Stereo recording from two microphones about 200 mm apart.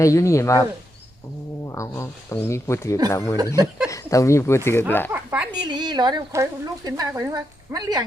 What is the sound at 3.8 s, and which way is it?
Speech, 15° left (ahead or behind).